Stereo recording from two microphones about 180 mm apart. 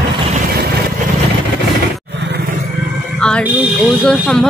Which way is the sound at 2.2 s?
75° right (ahead or behind).